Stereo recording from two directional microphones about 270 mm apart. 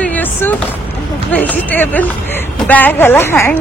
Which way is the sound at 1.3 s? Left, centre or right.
Centre.